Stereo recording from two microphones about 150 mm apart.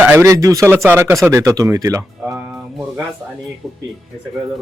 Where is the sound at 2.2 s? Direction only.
5° right (ahead or behind).